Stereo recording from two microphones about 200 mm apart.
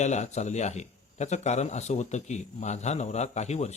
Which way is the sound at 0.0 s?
35° left (ahead or behind).